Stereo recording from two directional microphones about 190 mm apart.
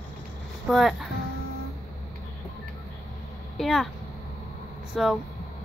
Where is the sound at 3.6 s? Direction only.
Centre (ahead or behind).